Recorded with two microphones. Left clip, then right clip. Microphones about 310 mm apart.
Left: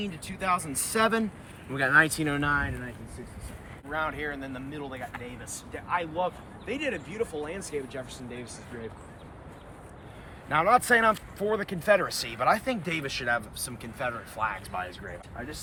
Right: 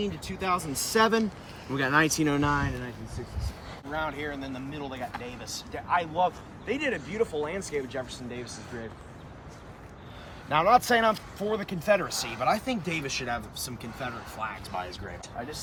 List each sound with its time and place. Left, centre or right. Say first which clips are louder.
0.0 s speech: right 1 dB; centre
3.9 s speech: left 1 dB; centre
5.7 s speech: right 3 dB; right
10.5 s speech: even; centre